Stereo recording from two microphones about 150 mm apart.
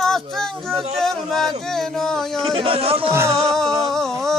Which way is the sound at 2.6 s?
40° right (ahead or behind).